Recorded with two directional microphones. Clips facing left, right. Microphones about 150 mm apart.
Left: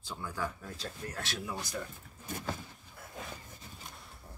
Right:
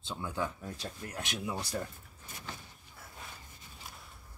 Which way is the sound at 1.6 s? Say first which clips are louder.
Right 2 dB; 30° right (ahead or behind).